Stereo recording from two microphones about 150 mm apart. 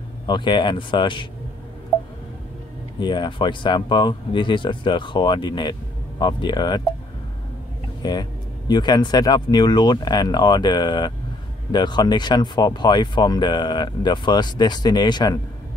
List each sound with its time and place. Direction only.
0.3 s speech: 30° left (ahead or behind)
3.0 s speech: 30° left (ahead or behind)
8.0 s speech: 25° left (ahead or behind)